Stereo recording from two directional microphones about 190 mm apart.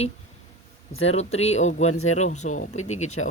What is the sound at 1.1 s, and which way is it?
Speech, 35° left (ahead or behind).